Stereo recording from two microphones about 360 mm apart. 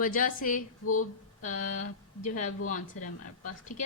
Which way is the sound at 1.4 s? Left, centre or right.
Left.